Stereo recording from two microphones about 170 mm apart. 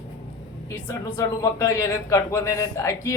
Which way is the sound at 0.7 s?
20° left (ahead or behind).